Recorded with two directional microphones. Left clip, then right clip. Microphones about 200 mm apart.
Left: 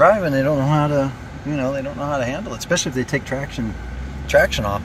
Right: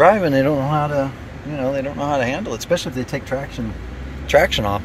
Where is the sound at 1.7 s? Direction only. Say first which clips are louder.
Right 3 dB; 25° right (ahead or behind).